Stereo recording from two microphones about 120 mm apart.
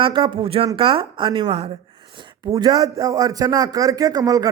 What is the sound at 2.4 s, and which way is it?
Speech, 30° right (ahead or behind).